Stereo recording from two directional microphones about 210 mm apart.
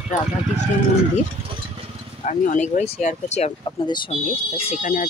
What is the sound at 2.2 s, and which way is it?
Speech, 35° left (ahead or behind).